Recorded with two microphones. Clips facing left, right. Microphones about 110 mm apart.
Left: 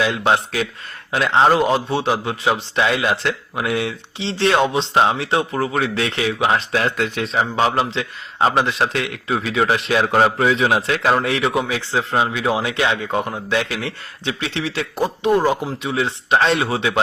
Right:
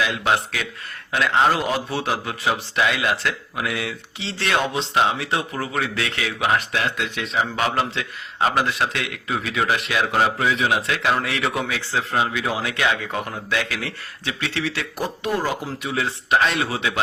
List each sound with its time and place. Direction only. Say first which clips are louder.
0.0 s a man's voice: left 4 dB; 30° left (ahead or behind)
7.5 s a man's voice: left 4 dB; 25° left (ahead or behind)